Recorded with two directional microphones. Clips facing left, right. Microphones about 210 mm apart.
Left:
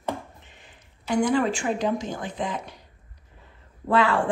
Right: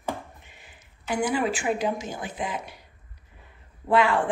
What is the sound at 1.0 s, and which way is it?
A woman's voice, 5° right (ahead or behind).